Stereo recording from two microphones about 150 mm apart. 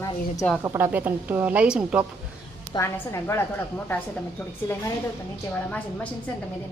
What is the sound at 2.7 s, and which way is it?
Speech, 20° left (ahead or behind).